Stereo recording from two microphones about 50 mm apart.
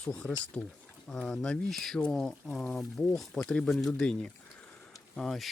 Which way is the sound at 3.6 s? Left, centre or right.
Centre.